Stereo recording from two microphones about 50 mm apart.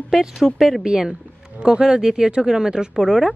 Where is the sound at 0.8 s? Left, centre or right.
Centre.